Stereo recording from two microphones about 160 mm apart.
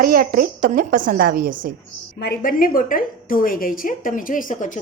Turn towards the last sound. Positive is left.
turn(degrees=55)  # may be behind; listen again after turning